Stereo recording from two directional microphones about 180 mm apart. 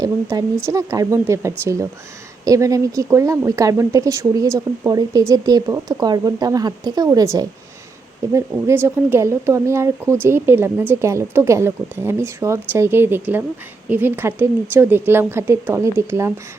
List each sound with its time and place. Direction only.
0.0 s speech: 15° right (ahead or behind)